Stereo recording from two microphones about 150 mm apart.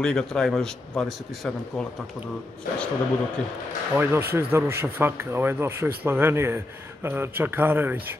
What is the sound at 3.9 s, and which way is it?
Speech, 15° right (ahead or behind).